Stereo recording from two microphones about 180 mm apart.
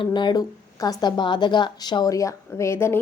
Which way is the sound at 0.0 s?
25° left (ahead or behind).